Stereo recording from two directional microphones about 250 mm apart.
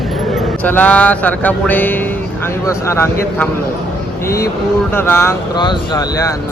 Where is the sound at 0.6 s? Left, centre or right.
Centre.